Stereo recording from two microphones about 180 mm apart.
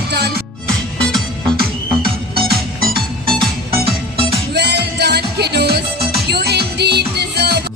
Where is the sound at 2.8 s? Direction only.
55° right (ahead or behind).